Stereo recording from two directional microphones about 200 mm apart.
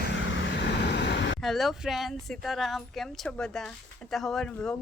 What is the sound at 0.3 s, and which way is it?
Vehicle, 60° left (ahead or behind).